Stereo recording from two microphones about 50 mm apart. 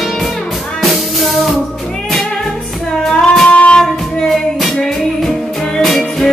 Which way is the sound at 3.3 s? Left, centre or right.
Left.